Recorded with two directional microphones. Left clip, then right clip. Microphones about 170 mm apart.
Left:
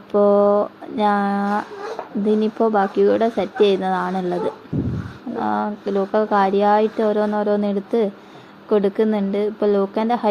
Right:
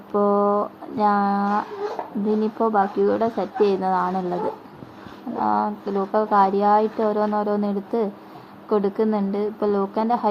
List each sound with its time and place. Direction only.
0.1 s speech: 40° left (ahead or behind)
5.4 s speech: 35° left (ahead or behind)